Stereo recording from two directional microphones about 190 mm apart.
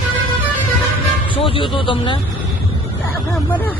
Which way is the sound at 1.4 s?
25° left (ahead or behind).